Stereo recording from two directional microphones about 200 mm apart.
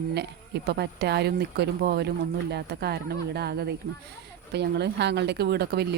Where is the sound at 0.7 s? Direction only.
55° right (ahead or behind).